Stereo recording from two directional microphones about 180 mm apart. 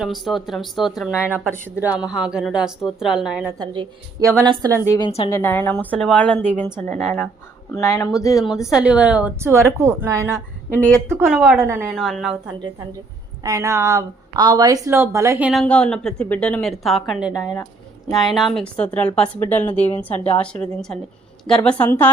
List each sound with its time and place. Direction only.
0.0 s a woman's voice: centre (ahead or behind)
1.5 s a woman's voice: 10° left (ahead or behind)
1.8 s a woman's voice: 5° right (ahead or behind)
3.6 s a woman's voice: 20° right (ahead or behind)
4.9 s speech: 25° left (ahead or behind)
5.3 s a woman's voice: 10° left (ahead or behind)
7.8 s speech: 15° left (ahead or behind)
8.6 s a woman's voice: 5° right (ahead or behind)
11.6 s a woman's voice: 15° right (ahead or behind)
11.9 s a woman's voice: centre (ahead or behind)
13.4 s a woman's voice: 15° right (ahead or behind)
15.6 s a woman's voice: 5° left (ahead or behind)
20.1 s a woman's voice: 35° left (ahead or behind)
20.4 s a woman's voice: 5° left (ahead or behind)